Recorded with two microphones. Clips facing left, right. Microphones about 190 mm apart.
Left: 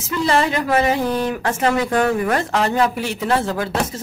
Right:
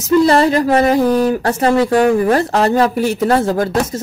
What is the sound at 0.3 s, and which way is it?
Speech, 35° right (ahead or behind).